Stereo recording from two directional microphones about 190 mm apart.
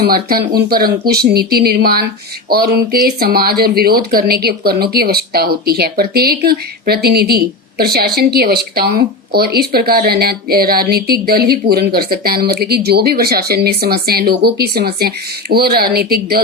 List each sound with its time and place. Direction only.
0.0 s speech: 55° right (ahead or behind)